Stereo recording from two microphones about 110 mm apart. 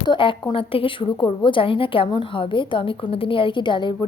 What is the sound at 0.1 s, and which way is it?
A woman's voice, 50° left (ahead or behind).